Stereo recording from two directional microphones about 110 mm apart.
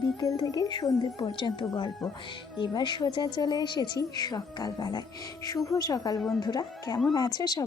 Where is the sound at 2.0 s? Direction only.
Centre (ahead or behind).